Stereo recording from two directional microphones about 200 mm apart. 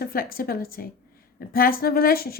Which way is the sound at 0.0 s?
50° left (ahead or behind).